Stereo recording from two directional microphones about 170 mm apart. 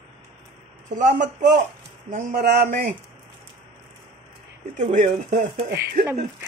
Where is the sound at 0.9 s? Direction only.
45° right (ahead or behind).